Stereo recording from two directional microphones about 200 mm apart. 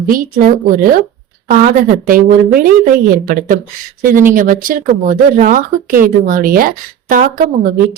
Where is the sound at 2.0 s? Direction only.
45° right (ahead or behind).